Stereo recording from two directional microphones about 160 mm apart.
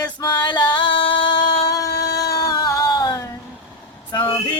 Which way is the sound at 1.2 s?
25° left (ahead or behind).